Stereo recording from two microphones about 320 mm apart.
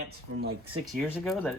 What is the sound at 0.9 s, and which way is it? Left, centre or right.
Speech, centre.